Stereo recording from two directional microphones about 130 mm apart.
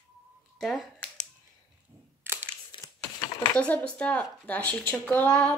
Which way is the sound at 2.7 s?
35° left (ahead or behind).